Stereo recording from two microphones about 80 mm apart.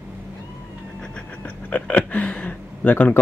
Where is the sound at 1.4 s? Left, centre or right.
Centre.